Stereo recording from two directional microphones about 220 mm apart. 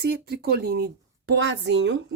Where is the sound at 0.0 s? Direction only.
45° right (ahead or behind).